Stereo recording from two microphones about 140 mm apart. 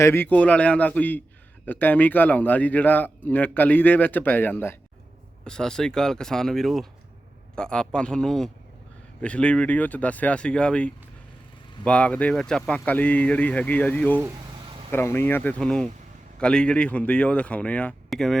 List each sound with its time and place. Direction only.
0.0 s a man's voice: 15° left (ahead or behind)
5.5 s a man's voice: 5° left (ahead or behind)
14.6 s vehicle: 40° right (ahead or behind)
14.9 s a man's voice: 15° left (ahead or behind)